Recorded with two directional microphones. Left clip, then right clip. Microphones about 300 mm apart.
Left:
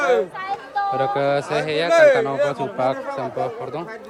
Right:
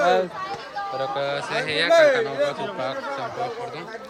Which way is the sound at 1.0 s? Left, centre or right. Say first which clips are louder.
Left 4 dB; centre.